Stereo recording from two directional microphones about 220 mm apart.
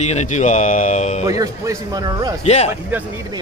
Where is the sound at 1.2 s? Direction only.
15° right (ahead or behind).